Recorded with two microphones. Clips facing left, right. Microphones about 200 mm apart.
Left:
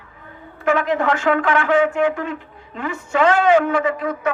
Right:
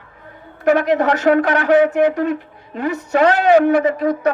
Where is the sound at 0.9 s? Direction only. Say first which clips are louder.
Right 4 dB; 40° right (ahead or behind).